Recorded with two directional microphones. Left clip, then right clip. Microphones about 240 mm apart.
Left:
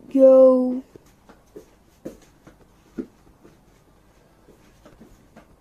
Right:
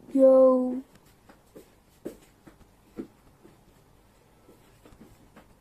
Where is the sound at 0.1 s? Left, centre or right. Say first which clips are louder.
Left 6 dB; centre.